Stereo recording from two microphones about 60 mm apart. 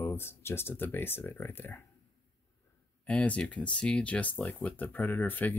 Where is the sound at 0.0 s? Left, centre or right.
Left.